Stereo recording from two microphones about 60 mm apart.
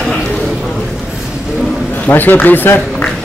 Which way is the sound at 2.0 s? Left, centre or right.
Left.